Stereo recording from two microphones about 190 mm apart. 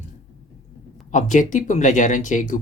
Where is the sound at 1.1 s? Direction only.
40° left (ahead or behind).